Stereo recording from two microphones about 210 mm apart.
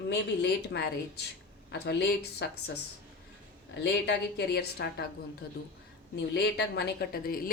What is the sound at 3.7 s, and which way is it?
A woman's voice, 55° left (ahead or behind).